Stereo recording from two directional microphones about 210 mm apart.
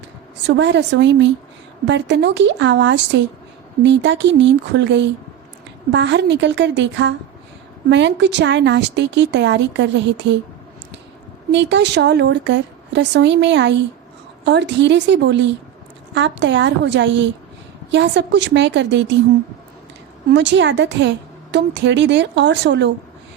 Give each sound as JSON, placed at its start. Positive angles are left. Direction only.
{"t": 0.4, "sound": "a woman's voice", "side_deg": -55}
{"t": 11.5, "sound": "a woman's voice", "side_deg": -55}
{"t": 20.3, "sound": "a woman's voice", "side_deg": -60}